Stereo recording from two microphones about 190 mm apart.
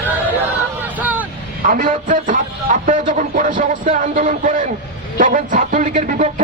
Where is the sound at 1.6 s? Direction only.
45° right (ahead or behind).